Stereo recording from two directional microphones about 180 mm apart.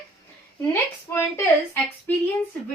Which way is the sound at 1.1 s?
15° left (ahead or behind).